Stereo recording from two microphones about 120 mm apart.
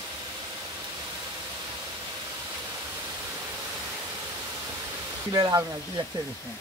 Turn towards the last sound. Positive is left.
turn(degrees=-30)  # may be behind; listen again after turning